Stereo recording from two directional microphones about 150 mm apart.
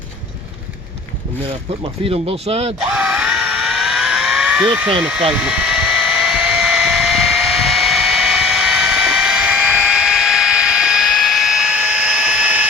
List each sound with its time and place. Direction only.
2.0 s speech: 40° right (ahead or behind)
2.9 s vehicle: 10° right (ahead or behind)